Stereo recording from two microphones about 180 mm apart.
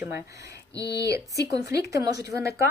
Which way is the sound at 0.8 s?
65° left (ahead or behind).